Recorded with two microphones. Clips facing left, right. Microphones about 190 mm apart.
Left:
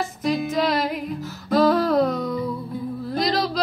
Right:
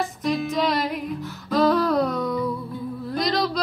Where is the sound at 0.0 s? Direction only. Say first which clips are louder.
Left 1 dB; centre (ahead or behind).